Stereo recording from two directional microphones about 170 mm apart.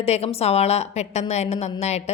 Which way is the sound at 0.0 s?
35° left (ahead or behind).